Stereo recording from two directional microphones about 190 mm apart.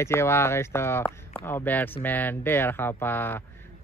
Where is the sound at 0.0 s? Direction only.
15° left (ahead or behind).